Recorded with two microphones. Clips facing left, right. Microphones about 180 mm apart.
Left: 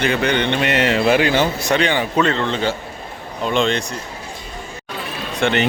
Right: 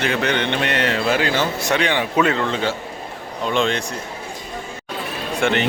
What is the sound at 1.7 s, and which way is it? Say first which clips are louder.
A man's voice: even; centre (ahead or behind).